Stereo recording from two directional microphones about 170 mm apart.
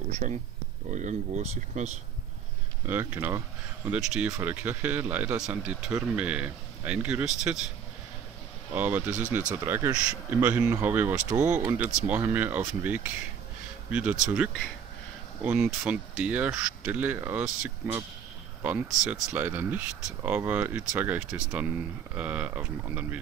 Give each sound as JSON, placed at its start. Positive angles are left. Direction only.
{"t": 0.2, "sound": "speech", "side_deg": -60}
{"t": 0.8, "sound": "speech", "side_deg": -45}
{"t": 2.9, "sound": "speech", "side_deg": -10}
{"t": 8.7, "sound": "speech", "side_deg": -10}